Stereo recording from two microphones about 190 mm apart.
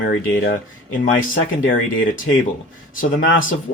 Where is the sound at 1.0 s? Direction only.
45° left (ahead or behind).